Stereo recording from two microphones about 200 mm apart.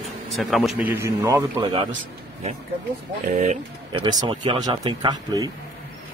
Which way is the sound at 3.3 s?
40° right (ahead or behind).